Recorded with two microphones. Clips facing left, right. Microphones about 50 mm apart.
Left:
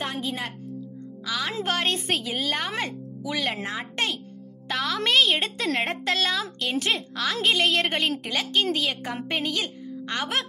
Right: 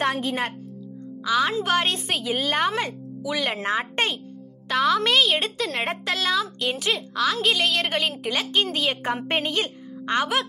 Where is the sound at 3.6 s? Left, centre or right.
Right.